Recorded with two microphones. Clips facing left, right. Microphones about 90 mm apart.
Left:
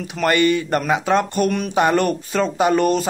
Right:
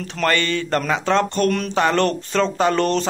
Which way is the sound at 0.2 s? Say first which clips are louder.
Left 4 dB; 15° left (ahead or behind).